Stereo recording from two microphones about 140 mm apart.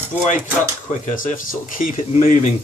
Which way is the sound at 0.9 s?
70° left (ahead or behind).